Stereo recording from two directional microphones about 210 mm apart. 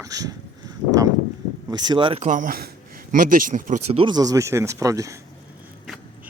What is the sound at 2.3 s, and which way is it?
A man's voice, 40° right (ahead or behind).